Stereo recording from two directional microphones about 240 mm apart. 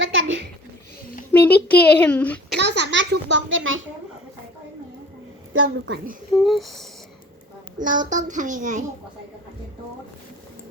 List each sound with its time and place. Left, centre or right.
0.0 s a sound: right
1.3 s a child's voice: centre
2.6 s a child's voice: right
5.6 s a child's voice: right
6.3 s a sound: centre
7.8 s a child's voice: right